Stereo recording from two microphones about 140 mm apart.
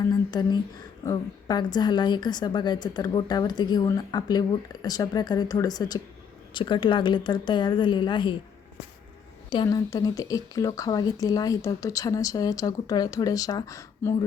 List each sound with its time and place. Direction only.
0.0 s a woman's voice: 30° left (ahead or behind)
9.6 s a woman's voice: 25° left (ahead or behind)